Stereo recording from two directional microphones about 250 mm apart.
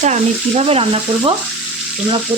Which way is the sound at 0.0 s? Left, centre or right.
Right.